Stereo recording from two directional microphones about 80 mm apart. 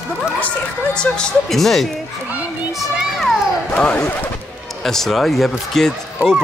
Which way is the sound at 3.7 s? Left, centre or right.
Centre.